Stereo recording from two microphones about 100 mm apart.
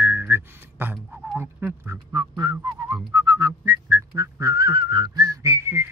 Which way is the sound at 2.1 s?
40° right (ahead or behind).